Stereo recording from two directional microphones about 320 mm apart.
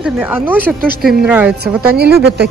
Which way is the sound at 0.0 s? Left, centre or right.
Centre.